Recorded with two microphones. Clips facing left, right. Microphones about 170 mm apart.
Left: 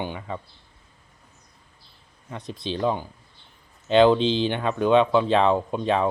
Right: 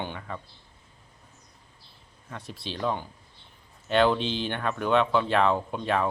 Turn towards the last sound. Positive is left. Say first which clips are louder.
# left 4 dB
turn(degrees=20)  # may be behind; listen again after turning